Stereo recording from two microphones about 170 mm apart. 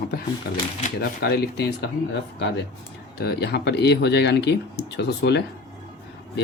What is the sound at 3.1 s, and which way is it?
Speech, 75° left (ahead or behind).